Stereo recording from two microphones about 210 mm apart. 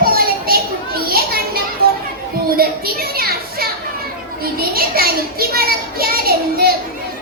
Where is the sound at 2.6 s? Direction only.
45° right (ahead or behind).